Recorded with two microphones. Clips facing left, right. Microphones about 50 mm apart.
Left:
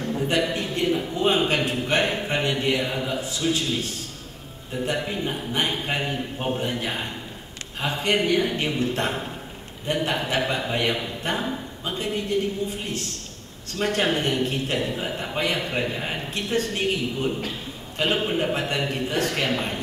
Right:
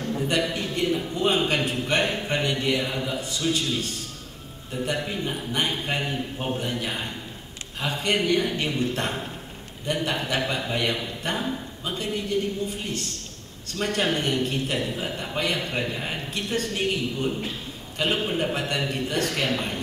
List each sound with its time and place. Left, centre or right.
0.0 s a sound: centre
0.4 s a man's voice: centre
4.9 s a man's voice: centre
13.7 s a man's voice: centre